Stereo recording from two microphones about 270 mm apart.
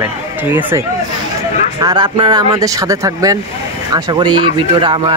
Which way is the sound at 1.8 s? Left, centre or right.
Centre.